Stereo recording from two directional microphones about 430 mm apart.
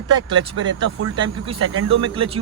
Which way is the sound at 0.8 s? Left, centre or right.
Right.